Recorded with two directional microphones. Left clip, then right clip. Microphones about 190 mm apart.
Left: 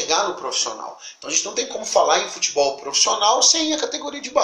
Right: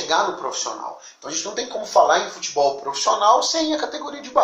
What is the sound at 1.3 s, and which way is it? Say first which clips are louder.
Speech: left 3 dB; 40° left (ahead or behind).